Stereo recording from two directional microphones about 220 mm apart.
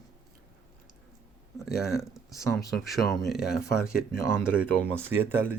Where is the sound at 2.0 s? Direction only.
Centre (ahead or behind).